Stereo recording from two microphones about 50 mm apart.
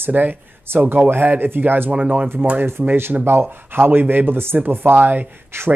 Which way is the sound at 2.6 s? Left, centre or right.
Right.